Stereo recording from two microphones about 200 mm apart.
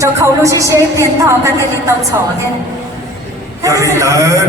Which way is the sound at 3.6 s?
15° right (ahead or behind).